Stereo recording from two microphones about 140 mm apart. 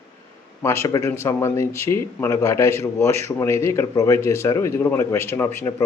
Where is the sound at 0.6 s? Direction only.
20° left (ahead or behind).